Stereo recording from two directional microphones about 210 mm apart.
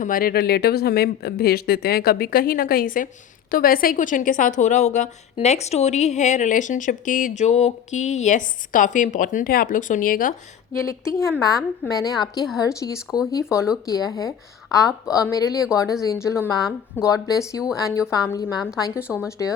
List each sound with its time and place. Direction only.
0.0 s a woman's voice: 45° left (ahead or behind)
10.8 s speech: 15° left (ahead or behind)
18.9 s a woman's voice: 5° right (ahead or behind)